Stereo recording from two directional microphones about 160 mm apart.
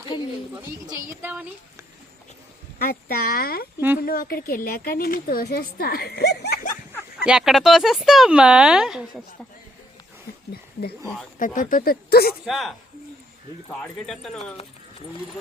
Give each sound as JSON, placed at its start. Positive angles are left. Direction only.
{"t": 1.2, "sound": "speech", "side_deg": -10}
{"t": 2.7, "sound": "a woman's voice", "side_deg": 70}
{"t": 7.3, "sound": "speech", "side_deg": 0}
{"t": 10.5, "sound": "speech", "side_deg": 85}
{"t": 11.3, "sound": "speech", "side_deg": 55}
{"t": 12.5, "sound": "speech", "side_deg": 0}
{"t": 14.1, "sound": "speech", "side_deg": 0}